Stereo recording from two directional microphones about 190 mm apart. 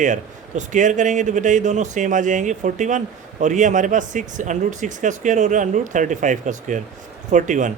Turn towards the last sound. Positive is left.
turn(degrees=-40)  # may be behind; listen again after turning